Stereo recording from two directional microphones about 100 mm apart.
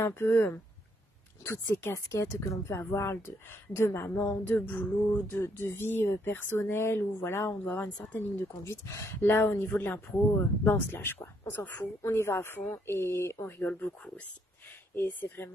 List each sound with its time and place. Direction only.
0.0 s a woman's voice: 20° left (ahead or behind)